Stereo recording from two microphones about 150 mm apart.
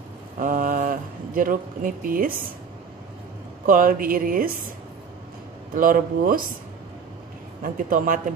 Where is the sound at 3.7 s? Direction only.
70° right (ahead or behind).